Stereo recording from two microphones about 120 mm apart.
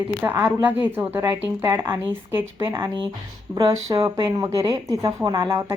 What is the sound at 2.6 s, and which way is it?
Speech, 35° right (ahead or behind).